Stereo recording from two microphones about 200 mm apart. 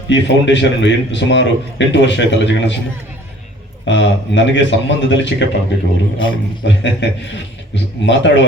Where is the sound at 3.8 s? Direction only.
60° left (ahead or behind).